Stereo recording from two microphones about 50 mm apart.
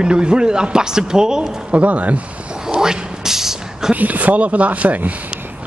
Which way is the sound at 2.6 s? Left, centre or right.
Centre.